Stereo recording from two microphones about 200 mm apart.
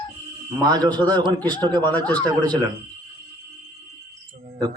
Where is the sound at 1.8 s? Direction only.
5° left (ahead or behind).